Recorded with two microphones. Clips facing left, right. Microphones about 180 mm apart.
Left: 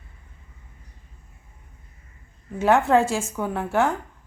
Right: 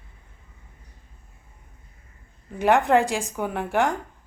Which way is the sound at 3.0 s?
15° right (ahead or behind).